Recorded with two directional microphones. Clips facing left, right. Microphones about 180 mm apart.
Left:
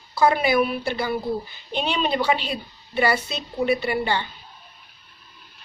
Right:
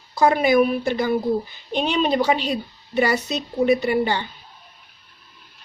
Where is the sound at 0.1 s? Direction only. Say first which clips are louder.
Right 2 dB; 45° right (ahead or behind).